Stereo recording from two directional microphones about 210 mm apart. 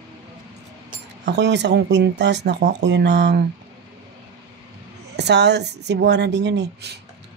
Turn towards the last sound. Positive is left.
turn(degrees=-50)  # may be behind; listen again after turning